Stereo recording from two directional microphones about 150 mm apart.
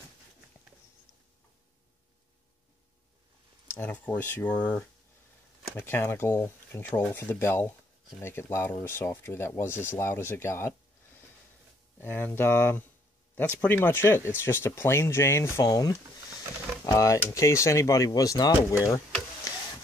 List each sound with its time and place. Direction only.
3.7 s speech: 10° left (ahead or behind)
12.0 s speech: 15° left (ahead or behind)
19.5 s a sound: 20° left (ahead or behind)